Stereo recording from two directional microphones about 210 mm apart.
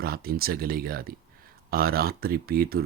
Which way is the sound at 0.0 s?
45° right (ahead or behind).